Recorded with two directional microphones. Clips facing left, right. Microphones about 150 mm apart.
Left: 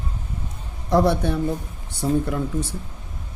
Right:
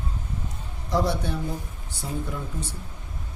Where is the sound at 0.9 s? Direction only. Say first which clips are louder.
Left 7 dB; 60° left (ahead or behind).